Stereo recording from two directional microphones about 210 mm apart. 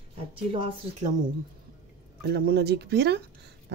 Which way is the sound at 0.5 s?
25° right (ahead or behind).